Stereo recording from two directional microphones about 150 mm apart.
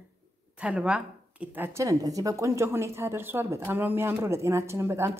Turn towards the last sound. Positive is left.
turn(degrees=-15)  # may be behind; listen again after turning